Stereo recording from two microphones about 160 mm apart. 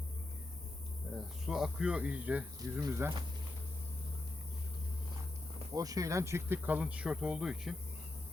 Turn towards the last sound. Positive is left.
turn(degrees=-5)  # may be behind; listen again after turning